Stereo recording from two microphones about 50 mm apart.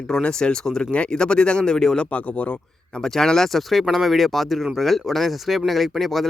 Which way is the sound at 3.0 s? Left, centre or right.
Centre.